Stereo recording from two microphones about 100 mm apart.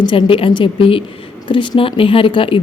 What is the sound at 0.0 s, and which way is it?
A woman's voice, 55° left (ahead or behind).